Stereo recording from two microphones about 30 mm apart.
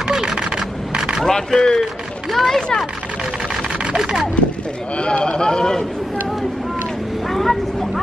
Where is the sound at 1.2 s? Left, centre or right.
Centre.